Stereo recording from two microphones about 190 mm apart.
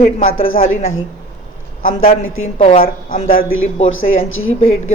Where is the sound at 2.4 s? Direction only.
35° left (ahead or behind).